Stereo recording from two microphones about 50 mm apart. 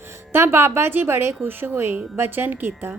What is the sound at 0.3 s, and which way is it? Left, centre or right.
A woman's voice, right.